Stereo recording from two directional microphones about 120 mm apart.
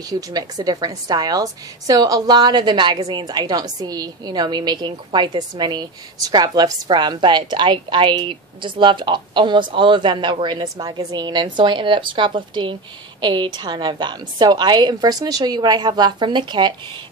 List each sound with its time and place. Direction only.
0.1 s a woman's voice: 30° right (ahead or behind)